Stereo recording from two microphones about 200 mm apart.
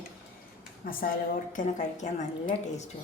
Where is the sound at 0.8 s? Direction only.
45° left (ahead or behind).